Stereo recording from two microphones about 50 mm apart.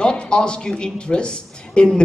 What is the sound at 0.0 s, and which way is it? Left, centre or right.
A man's voice, centre.